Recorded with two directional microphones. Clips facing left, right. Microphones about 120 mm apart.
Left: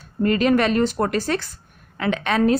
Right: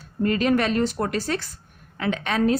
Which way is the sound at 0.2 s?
75° left (ahead or behind).